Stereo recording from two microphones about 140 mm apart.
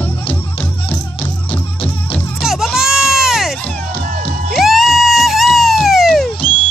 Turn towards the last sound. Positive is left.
turn(degrees=0)  # may be behind; listen again after turning